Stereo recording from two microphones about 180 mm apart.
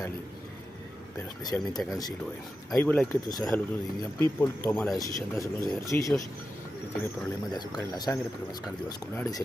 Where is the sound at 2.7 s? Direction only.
5° left (ahead or behind).